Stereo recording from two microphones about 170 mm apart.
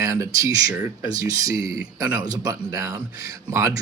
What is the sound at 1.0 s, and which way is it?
Speech, 20° right (ahead or behind).